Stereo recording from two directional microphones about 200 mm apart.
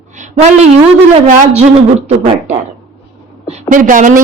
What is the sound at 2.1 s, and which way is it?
A woman's voice, 35° right (ahead or behind).